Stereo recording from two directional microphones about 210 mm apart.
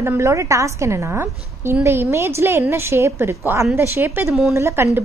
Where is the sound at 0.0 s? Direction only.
10° right (ahead or behind).